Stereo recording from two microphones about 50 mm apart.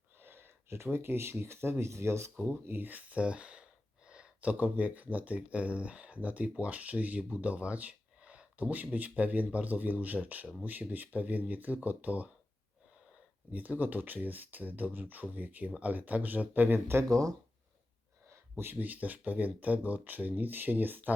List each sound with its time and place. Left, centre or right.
0.2 s a sound: right
0.9 s speech: right
2.4 s speech: right
8.7 s speech: right
13.5 s speech: right
16.9 s speech: right
18.3 s a sound: right
18.8 s speech: right